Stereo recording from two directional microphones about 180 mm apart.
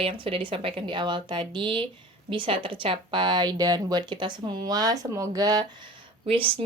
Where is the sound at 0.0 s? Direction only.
30° right (ahead or behind).